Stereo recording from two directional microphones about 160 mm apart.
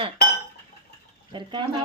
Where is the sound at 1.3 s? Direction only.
30° right (ahead or behind).